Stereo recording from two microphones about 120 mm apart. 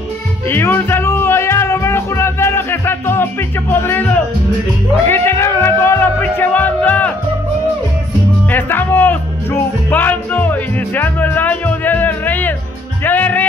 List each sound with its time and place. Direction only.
0.5 s music: 20° left (ahead or behind)
3.7 s speech: 15° left (ahead or behind)
5.0 s music: 20° left (ahead or behind)
8.5 s speech: 15° left (ahead or behind)
13.0 s music: 15° left (ahead or behind)